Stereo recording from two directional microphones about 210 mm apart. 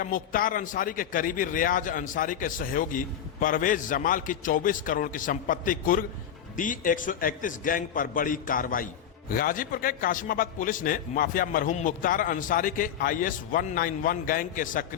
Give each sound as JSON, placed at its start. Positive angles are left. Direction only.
{"t": 0.0, "sound": "a man's voice", "side_deg": 40}